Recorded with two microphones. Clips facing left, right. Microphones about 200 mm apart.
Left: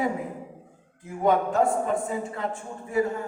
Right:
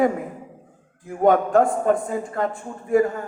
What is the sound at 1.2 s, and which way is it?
A man's voice, 50° right (ahead or behind).